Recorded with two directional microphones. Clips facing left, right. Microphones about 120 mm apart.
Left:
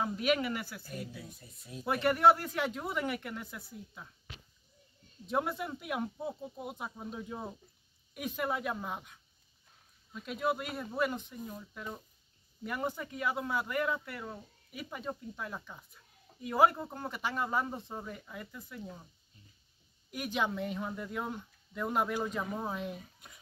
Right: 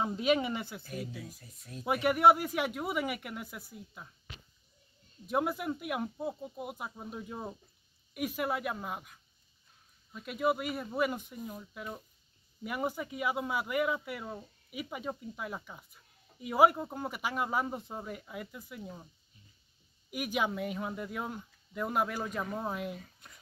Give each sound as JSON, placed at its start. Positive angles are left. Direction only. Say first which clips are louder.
{"t": 0.0, "sound": "speech", "louder": "right 2 dB", "side_deg": -25}
{"t": 1.1, "sound": "speech", "louder": "right 2 dB", "side_deg": 0}
{"t": 1.9, "sound": "speech", "louder": "right 1 dB", "side_deg": -15}
{"t": 5.2, "sound": "speech", "louder": "right 2 dB", "side_deg": -5}
{"t": 20.1, "sound": "speech", "louder": "right 1 dB", "side_deg": -10}